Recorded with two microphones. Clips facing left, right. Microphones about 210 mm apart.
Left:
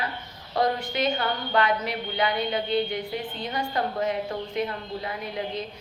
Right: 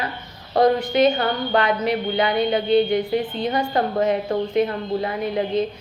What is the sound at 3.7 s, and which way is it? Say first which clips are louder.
Speech: right 5 dB; 60° right (ahead or behind).